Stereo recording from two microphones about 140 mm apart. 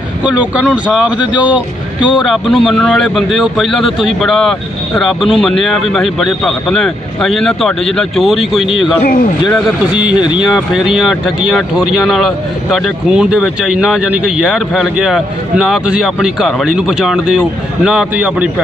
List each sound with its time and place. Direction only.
0.2 s speech: 10° right (ahead or behind)
2.0 s speech: 35° left (ahead or behind)
2.2 s speech: centre (ahead or behind)
9.0 s a man's voice: 90° left
9.8 s speech: 5° right (ahead or behind)